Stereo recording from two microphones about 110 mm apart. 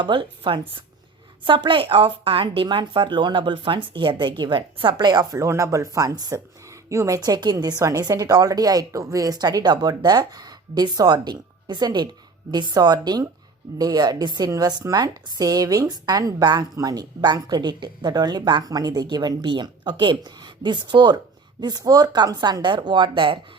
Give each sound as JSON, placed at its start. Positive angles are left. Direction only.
{"t": 0.0, "sound": "a woman's voice", "side_deg": -50}